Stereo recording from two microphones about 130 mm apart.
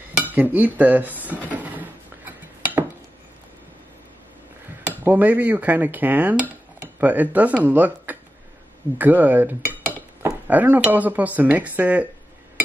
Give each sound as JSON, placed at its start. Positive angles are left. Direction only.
{"t": 0.3, "sound": "speech", "side_deg": -15}
{"t": 1.5, "sound": "dishes", "side_deg": -10}
{"t": 5.0, "sound": "speech", "side_deg": -15}
{"t": 8.9, "sound": "dishes", "side_deg": -15}
{"t": 10.5, "sound": "speech", "side_deg": -10}